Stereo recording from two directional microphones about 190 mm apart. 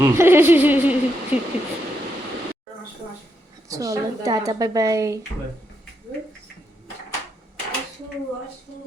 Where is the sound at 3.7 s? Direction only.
20° right (ahead or behind).